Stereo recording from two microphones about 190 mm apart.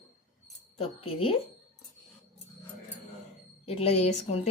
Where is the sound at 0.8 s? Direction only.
30° left (ahead or behind).